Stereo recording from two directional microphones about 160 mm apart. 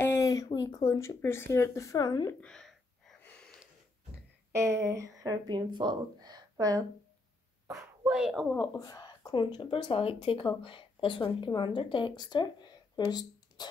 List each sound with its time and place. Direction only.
0.0 s speech: 20° left (ahead or behind)
2.4 s gasp: 5° left (ahead or behind)
4.5 s speech: 20° right (ahead or behind)
7.6 s a sound: 15° right (ahead or behind)
8.1 s speech: centre (ahead or behind)
8.5 s a woman's voice: 20° left (ahead or behind)